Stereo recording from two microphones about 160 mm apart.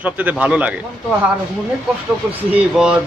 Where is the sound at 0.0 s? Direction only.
10° right (ahead or behind).